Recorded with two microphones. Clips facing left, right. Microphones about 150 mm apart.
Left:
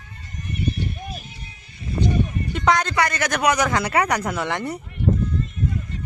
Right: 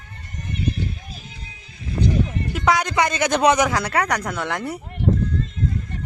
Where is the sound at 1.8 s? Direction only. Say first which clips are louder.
Right 1 dB; 90° right.